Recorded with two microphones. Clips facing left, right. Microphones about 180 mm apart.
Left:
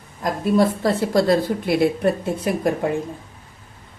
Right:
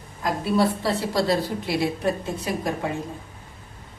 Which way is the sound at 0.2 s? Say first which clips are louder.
Left 4 dB; 45° left (ahead or behind).